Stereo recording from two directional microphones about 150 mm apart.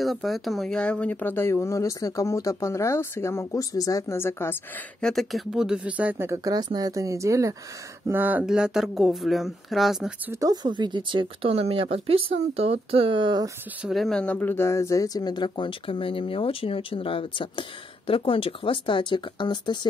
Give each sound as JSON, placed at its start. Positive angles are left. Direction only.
{"t": 0.0, "sound": "speech", "side_deg": 0}
{"t": 5.0, "sound": "speech", "side_deg": 0}
{"t": 10.3, "sound": "speech", "side_deg": -25}
{"t": 13.8, "sound": "speech", "side_deg": 0}